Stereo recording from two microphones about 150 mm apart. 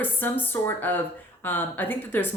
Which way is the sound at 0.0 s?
10° left (ahead or behind).